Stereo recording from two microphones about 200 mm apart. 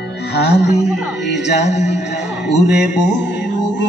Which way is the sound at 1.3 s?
60° left (ahead or behind).